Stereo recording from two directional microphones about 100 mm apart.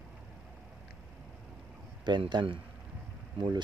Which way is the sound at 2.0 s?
50° right (ahead or behind).